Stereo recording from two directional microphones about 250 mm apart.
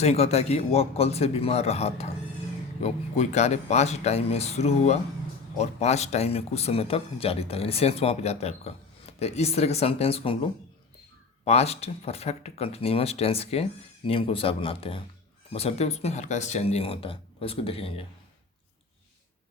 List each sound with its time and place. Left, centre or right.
0.0 s speech: left